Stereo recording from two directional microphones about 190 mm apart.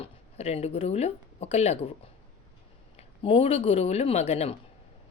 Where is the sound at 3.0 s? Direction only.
30° left (ahead or behind).